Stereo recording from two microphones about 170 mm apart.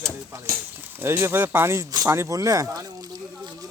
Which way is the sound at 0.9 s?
15° right (ahead or behind).